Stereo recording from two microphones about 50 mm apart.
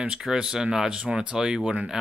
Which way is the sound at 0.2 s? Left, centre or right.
Centre.